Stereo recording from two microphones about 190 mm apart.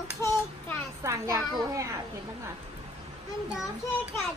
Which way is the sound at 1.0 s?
15° right (ahead or behind).